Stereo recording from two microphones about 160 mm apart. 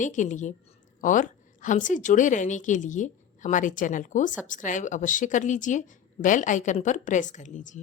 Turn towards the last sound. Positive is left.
turn(degrees=50)  # may be behind; listen again after turning